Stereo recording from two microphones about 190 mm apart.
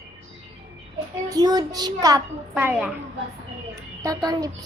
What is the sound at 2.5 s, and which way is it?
Female singing, 10° right (ahead or behind).